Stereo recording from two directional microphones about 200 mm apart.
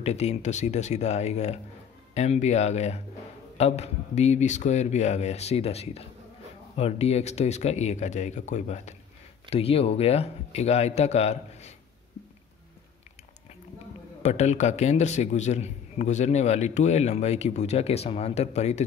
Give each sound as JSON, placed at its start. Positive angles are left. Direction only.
{"t": 0.0, "sound": "a man's voice", "side_deg": 35}
{"t": 14.2, "sound": "a man's voice", "side_deg": 35}